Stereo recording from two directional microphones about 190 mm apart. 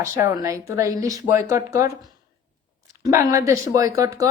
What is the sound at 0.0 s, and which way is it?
A woman's voice, 15° right (ahead or behind).